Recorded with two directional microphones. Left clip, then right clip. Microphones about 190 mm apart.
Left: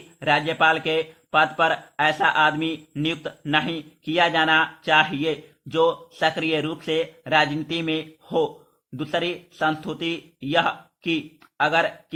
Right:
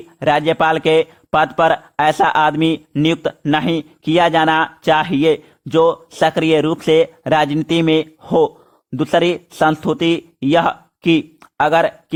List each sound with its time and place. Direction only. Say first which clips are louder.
0.2 s a man's voice: right 6 dB; 45° right (ahead or behind)